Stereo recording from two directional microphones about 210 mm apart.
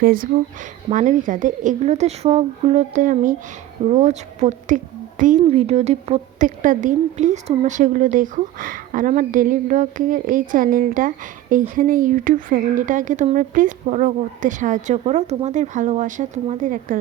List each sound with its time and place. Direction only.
0.0 s a woman's voice: 45° right (ahead or behind)